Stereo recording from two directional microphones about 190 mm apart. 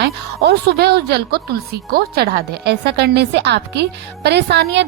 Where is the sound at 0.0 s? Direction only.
60° right (ahead or behind).